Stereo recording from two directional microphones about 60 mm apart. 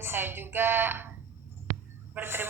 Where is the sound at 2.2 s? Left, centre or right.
Right.